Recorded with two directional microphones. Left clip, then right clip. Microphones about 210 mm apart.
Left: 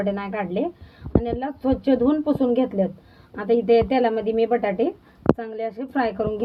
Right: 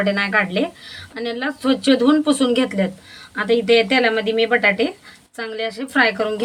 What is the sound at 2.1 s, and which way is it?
Speech, 55° right (ahead or behind).